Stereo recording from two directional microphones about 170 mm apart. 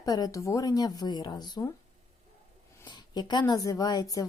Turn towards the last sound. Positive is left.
turn(degrees=20)  # may be behind; listen again after turning